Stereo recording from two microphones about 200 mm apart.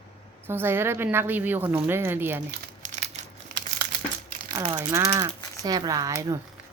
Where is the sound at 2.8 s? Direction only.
40° right (ahead or behind).